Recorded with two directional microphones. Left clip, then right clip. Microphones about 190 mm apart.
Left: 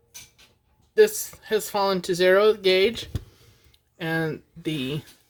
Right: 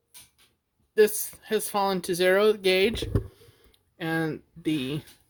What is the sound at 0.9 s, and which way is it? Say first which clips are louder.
Speech: left 3 dB; 30° right (ahead or behind).